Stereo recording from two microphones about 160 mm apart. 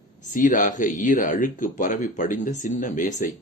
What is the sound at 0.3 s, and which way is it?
Speech, 55° left (ahead or behind).